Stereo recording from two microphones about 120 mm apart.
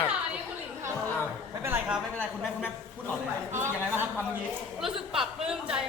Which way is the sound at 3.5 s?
20° right (ahead or behind).